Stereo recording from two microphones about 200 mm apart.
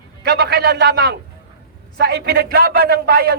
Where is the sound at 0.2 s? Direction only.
55° right (ahead or behind).